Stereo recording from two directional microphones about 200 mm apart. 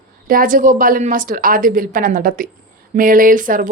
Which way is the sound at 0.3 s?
45° right (ahead or behind).